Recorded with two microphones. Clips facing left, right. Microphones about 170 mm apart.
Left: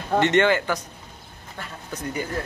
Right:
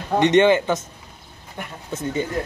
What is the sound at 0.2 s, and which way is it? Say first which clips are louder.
Speech: right 5 dB; 20° right (ahead or behind).